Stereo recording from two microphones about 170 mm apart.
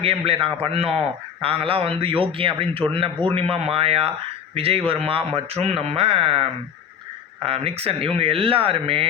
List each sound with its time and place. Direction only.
0.0 s a man's voice: 35° right (ahead or behind)